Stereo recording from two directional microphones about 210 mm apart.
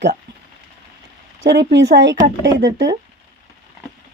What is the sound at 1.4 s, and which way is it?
Speech, 55° right (ahead or behind).